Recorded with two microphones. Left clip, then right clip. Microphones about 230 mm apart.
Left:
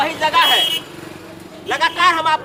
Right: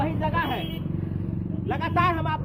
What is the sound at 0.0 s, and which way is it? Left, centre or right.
Vehicle, centre.